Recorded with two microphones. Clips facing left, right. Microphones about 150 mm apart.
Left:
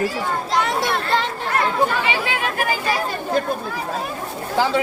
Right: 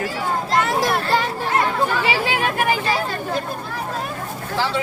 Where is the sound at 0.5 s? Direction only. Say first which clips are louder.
Right 2 dB; centre (ahead or behind).